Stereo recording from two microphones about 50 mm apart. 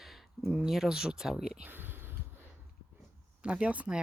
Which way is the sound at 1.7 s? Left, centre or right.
Right.